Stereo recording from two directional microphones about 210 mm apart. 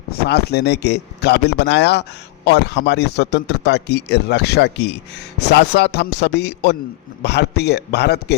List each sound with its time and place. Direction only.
0.3 s a man's voice: 50° left (ahead or behind)